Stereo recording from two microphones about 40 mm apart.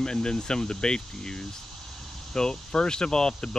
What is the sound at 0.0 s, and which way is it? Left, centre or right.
Speech, centre.